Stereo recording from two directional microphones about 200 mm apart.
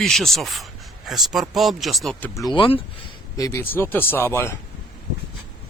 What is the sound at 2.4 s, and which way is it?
Speech, 20° left (ahead or behind).